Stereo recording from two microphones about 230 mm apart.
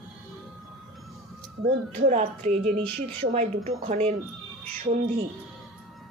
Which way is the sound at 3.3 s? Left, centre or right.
Right.